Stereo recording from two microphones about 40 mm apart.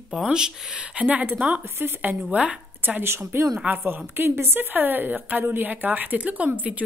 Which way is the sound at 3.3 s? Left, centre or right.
Right.